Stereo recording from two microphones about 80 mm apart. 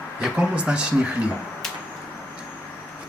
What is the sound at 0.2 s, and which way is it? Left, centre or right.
Speech, centre.